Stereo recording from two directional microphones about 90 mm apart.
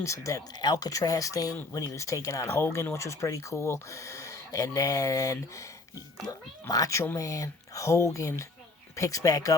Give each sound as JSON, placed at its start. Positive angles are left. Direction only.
{"t": 0.0, "sound": "speech", "side_deg": 35}
{"t": 6.7, "sound": "speech", "side_deg": 40}